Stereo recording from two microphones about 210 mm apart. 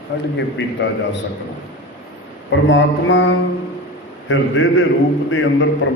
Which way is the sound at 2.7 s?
60° left (ahead or behind).